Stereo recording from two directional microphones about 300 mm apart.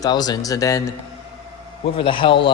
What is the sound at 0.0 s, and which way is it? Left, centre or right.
Speech, centre.